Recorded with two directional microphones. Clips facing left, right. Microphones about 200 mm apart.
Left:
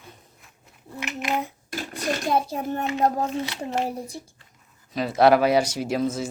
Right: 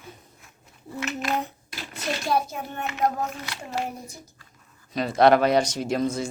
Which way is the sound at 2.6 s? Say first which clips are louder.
Left 3 dB; 40° left (ahead or behind).